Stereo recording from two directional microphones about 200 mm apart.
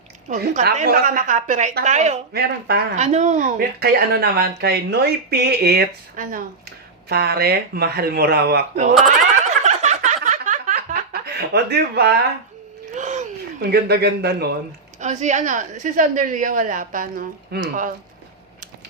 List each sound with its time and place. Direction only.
0.3 s a woman's voice: 40° right (ahead or behind)
2.3 s speech: 50° right (ahead or behind)
2.9 s speech: 35° right (ahead or behind); by 8.6 s 55° right (ahead or behind)
8.7 s a woman's voice: 35° right (ahead or behind)
9.6 s a sound: 35° right (ahead or behind)
10.2 s snicker: 40° right (ahead or behind)
11.3 s speech: 55° right (ahead or behind)
12.9 s a sound: 35° right (ahead or behind)
13.6 s speech: 55° right (ahead or behind)
15.0 s a woman's voice: 35° right (ahead or behind)